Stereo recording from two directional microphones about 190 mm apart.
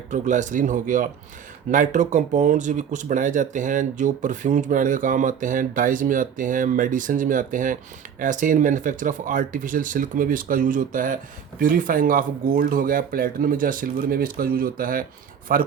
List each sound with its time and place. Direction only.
0.1 s speech: 40° right (ahead or behind)